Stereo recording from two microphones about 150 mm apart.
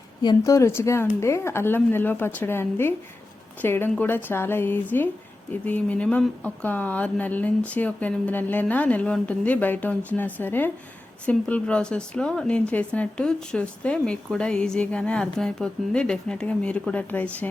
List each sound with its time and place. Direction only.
0.2 s speech: 25° left (ahead or behind); by 17.5 s 10° left (ahead or behind)